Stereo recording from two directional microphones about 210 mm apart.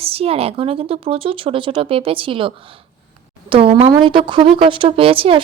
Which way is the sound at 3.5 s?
25° right (ahead or behind).